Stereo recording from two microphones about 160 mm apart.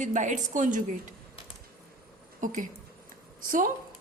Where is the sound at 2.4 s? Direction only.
55° right (ahead or behind).